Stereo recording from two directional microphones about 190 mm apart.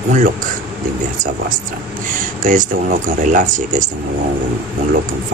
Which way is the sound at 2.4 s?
45° right (ahead or behind).